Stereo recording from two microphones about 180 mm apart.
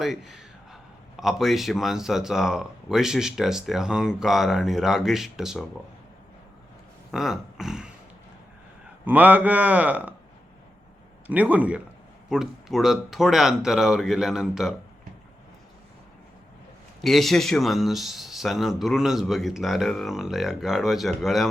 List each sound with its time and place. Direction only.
0.0 s a man's voice: centre (ahead or behind)
7.1 s speech: centre (ahead or behind)
9.0 s speech: 10° right (ahead or behind)
11.3 s a man's voice: 10° right (ahead or behind)
17.0 s a man's voice: centre (ahead or behind)